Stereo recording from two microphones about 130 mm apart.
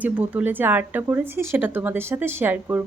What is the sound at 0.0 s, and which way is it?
A woman's voice, 10° right (ahead or behind).